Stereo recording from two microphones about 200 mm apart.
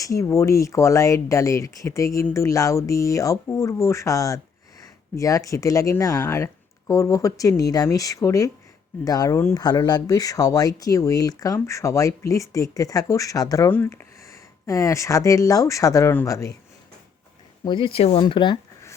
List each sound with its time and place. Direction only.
0.0 s speech: 15° left (ahead or behind)
17.7 s speech: 25° left (ahead or behind)